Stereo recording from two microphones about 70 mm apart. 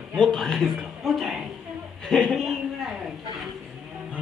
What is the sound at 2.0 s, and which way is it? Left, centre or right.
Speech, centre.